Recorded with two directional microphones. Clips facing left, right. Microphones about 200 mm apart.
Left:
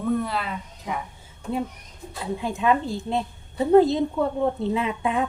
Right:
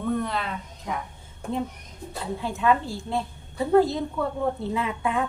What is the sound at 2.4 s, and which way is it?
A woman's voice, 15° left (ahead or behind).